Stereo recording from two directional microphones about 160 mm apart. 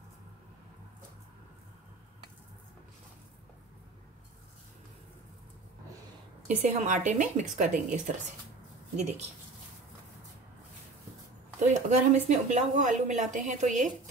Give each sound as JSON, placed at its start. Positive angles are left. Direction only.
{"t": 6.4, "sound": "speech", "side_deg": -45}
{"t": 11.6, "sound": "speech", "side_deg": -50}